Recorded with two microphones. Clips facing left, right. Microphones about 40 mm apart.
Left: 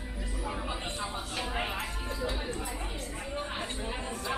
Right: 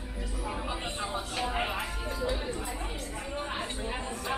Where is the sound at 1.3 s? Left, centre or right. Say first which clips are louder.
Right 3 dB; centre.